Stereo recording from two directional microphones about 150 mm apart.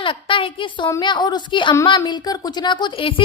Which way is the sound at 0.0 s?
35° left (ahead or behind).